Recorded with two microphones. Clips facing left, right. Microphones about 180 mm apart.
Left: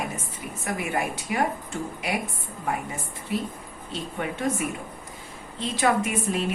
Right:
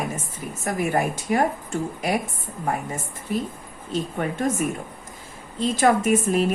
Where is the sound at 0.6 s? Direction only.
45° right (ahead or behind).